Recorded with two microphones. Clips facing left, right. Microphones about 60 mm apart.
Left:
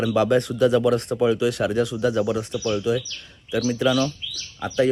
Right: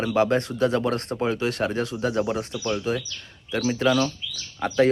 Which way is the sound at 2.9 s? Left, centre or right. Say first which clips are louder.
Left 4 dB; right.